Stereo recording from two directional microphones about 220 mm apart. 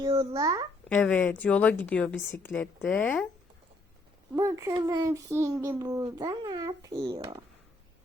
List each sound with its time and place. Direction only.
0.0 s a child's voice: 20° right (ahead or behind)
0.9 s a woman's voice: 10° left (ahead or behind)
4.4 s a child's voice: 15° right (ahead or behind)